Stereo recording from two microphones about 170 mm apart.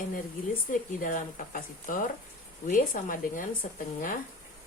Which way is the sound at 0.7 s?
50° left (ahead or behind).